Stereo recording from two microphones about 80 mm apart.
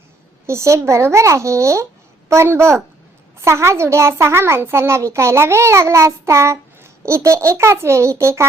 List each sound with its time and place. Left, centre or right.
0.4 s a child's voice: right